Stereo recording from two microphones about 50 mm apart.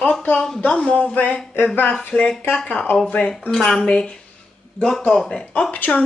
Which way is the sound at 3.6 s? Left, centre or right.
Centre.